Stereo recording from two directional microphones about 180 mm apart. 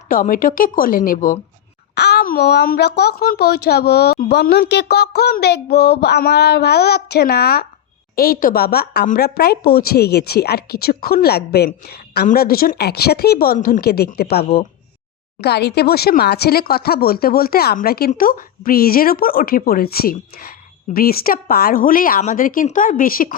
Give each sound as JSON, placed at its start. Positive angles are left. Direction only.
{"t": 0.1, "sound": "a woman's voice", "side_deg": 50}
{"t": 2.0, "sound": "speech", "side_deg": 65}